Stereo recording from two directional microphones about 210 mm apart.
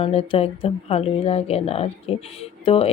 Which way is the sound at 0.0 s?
25° left (ahead or behind).